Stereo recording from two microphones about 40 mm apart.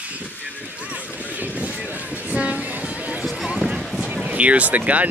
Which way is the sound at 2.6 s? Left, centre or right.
Right.